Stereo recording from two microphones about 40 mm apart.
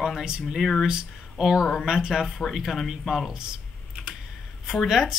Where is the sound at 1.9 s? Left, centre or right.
Centre.